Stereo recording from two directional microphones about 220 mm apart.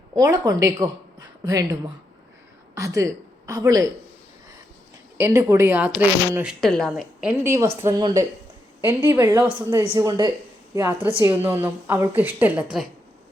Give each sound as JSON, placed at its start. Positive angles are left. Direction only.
{"t": 0.1, "sound": "speech", "side_deg": -15}
{"t": 5.2, "sound": "a woman's voice", "side_deg": -15}